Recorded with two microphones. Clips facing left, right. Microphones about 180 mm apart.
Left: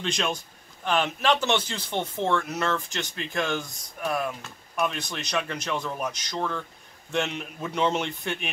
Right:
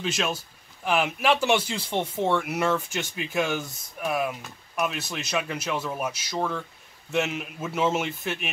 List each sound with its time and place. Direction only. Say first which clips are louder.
0.0 s a man's voice: even; 5° right (ahead or behind)